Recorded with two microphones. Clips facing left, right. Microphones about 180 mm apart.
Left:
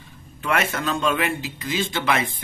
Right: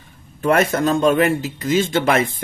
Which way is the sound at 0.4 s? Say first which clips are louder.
Right 8 dB; 40° right (ahead or behind).